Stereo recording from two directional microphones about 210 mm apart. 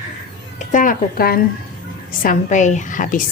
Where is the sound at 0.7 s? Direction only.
40° left (ahead or behind).